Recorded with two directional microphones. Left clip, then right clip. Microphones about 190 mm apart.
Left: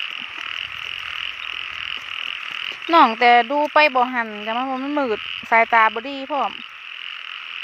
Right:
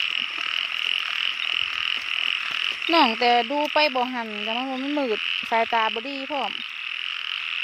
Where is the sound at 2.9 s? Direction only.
10° left (ahead or behind).